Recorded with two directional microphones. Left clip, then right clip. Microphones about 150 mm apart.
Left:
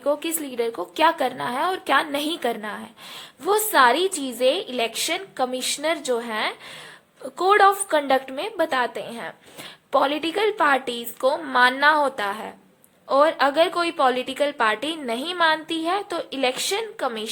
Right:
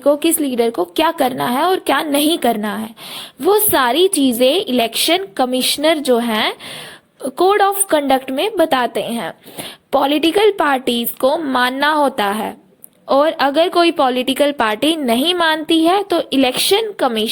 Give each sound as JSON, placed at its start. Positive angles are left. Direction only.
{"t": 0.0, "sound": "a woman's voice", "side_deg": -25}